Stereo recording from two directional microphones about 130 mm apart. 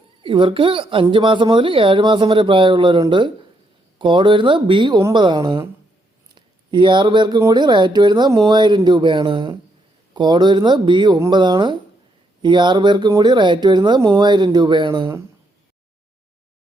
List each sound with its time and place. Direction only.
0.2 s speech: 40° right (ahead or behind)